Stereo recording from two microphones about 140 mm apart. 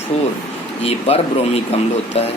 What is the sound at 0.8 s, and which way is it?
Speech, 45° left (ahead or behind).